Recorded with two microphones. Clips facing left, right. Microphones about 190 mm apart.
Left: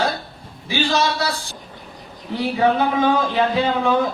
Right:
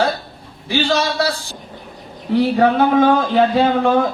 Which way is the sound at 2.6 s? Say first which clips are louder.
Right 2 dB; 55° right (ahead or behind).